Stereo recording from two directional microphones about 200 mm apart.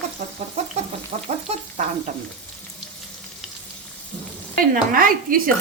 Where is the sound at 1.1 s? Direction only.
30° right (ahead or behind).